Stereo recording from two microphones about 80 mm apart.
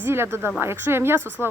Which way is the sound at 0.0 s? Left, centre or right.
Right.